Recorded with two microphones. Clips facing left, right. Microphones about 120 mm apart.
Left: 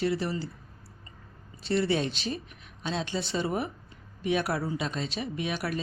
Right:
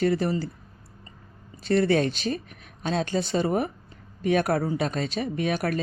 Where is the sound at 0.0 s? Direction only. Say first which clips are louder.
Right 5 dB; 45° right (ahead or behind).